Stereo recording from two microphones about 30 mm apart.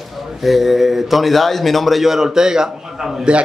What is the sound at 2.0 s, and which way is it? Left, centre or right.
A man's voice, centre.